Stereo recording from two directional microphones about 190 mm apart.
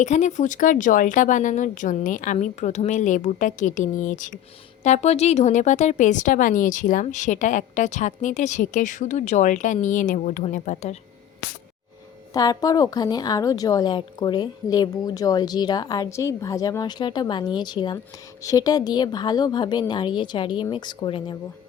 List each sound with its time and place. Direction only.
0.0 s speech: 40° left (ahead or behind)
12.3 s a woman's voice: 20° left (ahead or behind)